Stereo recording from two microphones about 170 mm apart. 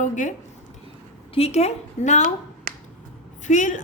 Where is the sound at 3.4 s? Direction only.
45° left (ahead or behind).